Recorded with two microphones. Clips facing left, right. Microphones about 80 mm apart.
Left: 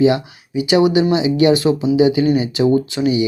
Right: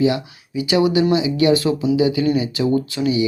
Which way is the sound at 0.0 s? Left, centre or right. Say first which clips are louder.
Left 4 dB; left.